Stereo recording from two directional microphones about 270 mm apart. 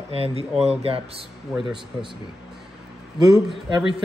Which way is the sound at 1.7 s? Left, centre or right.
Centre.